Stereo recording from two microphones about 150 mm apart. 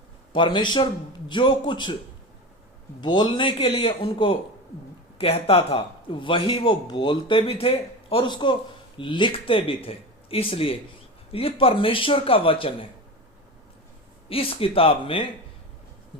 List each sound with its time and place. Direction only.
0.3 s a man's voice: 30° left (ahead or behind)
3.0 s a man's voice: 30° left (ahead or behind)
14.3 s a man's voice: 40° left (ahead or behind)